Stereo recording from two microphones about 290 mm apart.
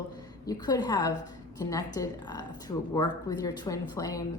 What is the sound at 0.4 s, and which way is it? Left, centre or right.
Speech, centre.